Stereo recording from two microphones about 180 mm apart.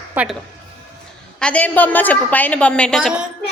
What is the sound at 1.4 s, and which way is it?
A woman's voice, 10° left (ahead or behind).